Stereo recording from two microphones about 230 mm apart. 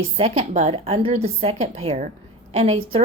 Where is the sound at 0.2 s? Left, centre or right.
Right.